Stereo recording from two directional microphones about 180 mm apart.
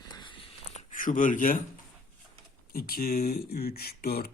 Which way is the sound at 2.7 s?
55° left (ahead or behind).